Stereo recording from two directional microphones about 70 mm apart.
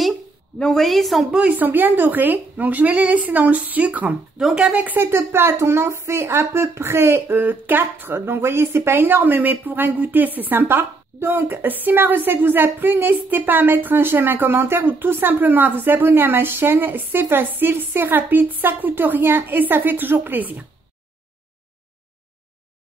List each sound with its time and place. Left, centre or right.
0.6 s a woman's voice: centre
1.6 s speech: right